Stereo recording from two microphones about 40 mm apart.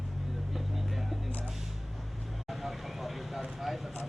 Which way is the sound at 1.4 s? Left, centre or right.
Centre.